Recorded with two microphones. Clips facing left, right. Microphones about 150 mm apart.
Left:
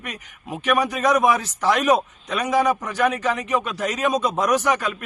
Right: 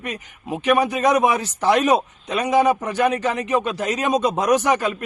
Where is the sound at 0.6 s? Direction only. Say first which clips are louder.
Right 2 dB; 25° right (ahead or behind).